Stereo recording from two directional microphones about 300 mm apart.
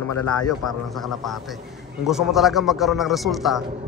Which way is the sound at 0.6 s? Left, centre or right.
Left.